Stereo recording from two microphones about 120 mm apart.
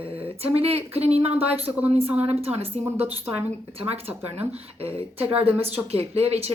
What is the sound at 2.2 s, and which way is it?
Speech, 55° right (ahead or behind).